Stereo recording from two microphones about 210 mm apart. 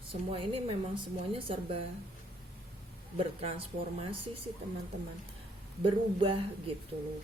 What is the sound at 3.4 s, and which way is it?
Speech, 25° right (ahead or behind).